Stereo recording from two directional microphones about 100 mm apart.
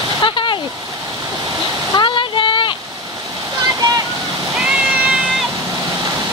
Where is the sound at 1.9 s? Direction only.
55° left (ahead or behind).